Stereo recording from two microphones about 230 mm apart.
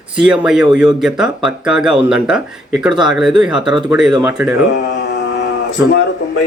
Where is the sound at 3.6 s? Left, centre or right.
Centre.